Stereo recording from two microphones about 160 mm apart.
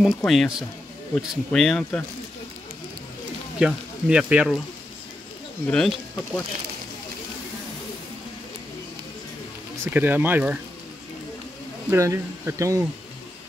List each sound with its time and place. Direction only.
0.0 s speech: centre (ahead or behind)
3.5 s speech: 5° right (ahead or behind)
5.7 s speech: 5° left (ahead or behind)
9.8 s speech: 10° right (ahead or behind)
11.9 s speech: 15° right (ahead or behind)